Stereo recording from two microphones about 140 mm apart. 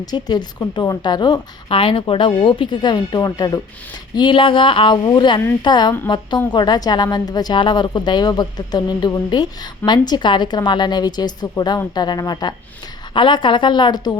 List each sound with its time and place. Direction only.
0.0 s a woman's voice: 30° left (ahead or behind)